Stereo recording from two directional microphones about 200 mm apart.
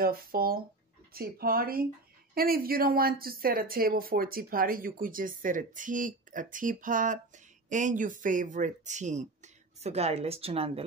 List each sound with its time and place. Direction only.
0.0 s speech: 50° right (ahead or behind); by 10.8 s 30° right (ahead or behind)